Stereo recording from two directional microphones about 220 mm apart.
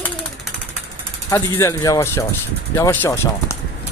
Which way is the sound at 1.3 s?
15° left (ahead or behind).